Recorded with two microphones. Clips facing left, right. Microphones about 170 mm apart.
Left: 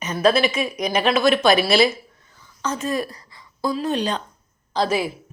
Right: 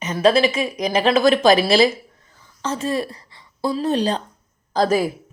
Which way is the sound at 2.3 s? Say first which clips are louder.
Right 1 dB; 30° right (ahead or behind).